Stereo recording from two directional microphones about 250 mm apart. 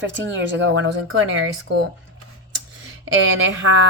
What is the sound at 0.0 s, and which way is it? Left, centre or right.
A woman's voice, right.